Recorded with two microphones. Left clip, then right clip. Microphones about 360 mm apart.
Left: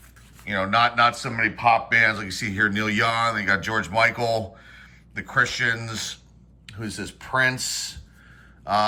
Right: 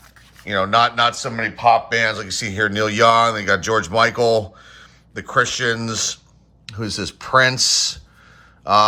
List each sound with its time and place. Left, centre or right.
0.4 s speech: centre
8.6 s mantra: centre